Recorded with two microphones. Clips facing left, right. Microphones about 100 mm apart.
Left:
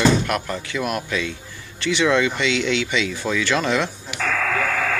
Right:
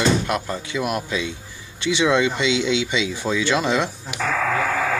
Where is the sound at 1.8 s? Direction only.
20° right (ahead or behind).